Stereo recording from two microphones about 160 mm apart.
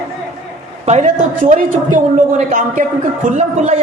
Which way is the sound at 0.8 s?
50° right (ahead or behind).